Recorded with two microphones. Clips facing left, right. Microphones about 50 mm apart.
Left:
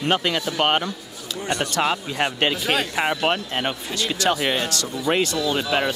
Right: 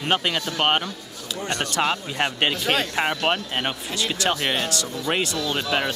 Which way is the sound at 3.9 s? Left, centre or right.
Right.